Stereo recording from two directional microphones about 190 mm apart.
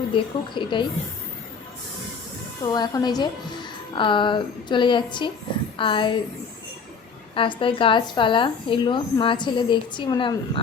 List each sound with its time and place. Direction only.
0.1 s speech: 25° left (ahead or behind)
2.7 s speech: 20° left (ahead or behind)
7.3 s speech: 25° left (ahead or behind)